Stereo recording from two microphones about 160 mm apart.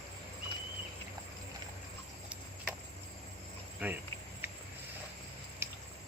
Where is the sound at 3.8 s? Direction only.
10° right (ahead or behind).